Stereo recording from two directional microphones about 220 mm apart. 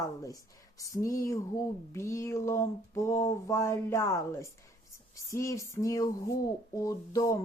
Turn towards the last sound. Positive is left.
turn(degrees=15)  # may be behind; listen again after turning